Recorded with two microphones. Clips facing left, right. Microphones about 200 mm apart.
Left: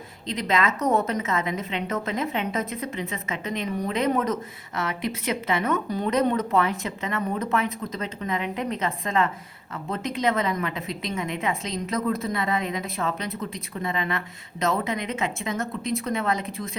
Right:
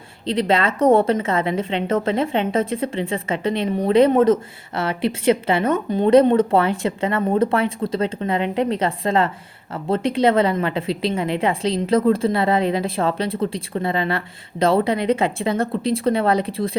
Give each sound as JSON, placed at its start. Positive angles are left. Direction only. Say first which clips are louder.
{"t": 0.3, "sound": "a woman's voice", "louder": "right 6 dB", "side_deg": -30}